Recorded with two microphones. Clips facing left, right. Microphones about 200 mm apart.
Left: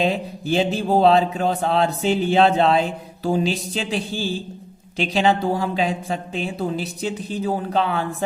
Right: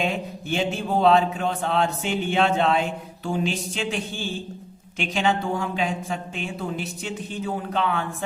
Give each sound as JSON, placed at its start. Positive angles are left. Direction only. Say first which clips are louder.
{"t": 0.0, "sound": "speech", "louder": "left 5 dB", "side_deg": 35}